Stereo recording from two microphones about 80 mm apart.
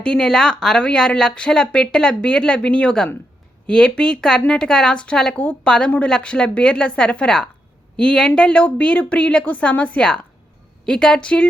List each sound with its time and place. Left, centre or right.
0.0 s speech: centre